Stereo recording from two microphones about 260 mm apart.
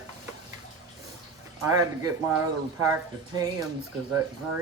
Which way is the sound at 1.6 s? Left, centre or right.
Centre.